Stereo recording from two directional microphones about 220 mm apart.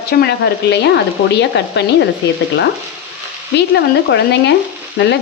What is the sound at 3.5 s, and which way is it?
Speech, 50° left (ahead or behind).